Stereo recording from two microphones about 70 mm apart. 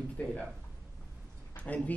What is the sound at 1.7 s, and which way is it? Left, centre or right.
Speech, left.